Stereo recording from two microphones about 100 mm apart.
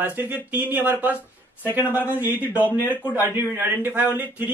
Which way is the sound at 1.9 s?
20° left (ahead or behind).